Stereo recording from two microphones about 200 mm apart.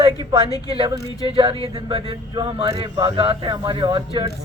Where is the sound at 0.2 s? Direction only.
20° right (ahead or behind).